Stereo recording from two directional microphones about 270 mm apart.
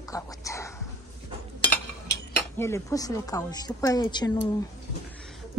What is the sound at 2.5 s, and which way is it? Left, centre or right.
A woman's voice, centre.